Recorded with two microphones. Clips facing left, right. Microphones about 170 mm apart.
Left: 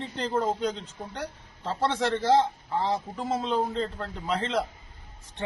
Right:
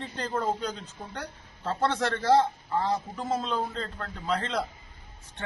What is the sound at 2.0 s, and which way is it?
A man's voice, 25° left (ahead or behind).